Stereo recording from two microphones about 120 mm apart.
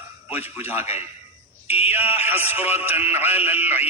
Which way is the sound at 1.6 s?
55° left (ahead or behind).